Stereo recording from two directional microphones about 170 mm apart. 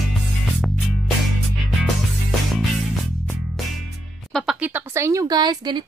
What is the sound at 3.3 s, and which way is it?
Music, centre (ahead or behind).